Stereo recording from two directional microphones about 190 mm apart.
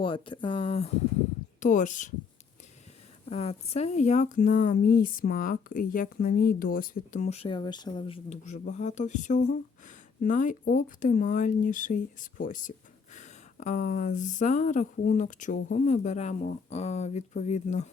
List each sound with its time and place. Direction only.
0.0 s speech: 25° left (ahead or behind)
1.6 s speech: 40° left (ahead or behind)
3.2 s speech: 35° left (ahead or behind)